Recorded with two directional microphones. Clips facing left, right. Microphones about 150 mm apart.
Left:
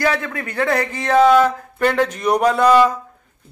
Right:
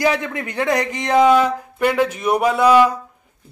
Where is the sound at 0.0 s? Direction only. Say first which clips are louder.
Right 1 dB; 20° right (ahead or behind).